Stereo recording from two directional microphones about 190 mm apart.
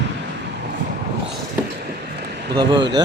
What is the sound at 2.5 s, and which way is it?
Speech, 20° right (ahead or behind).